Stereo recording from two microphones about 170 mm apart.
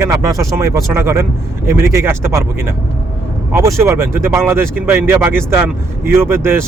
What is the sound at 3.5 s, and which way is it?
Speech, 15° right (ahead or behind).